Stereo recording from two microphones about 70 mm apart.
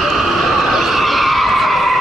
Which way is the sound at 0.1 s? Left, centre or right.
Centre.